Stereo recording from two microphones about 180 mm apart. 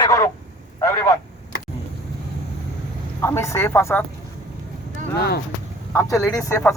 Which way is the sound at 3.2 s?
15° left (ahead or behind).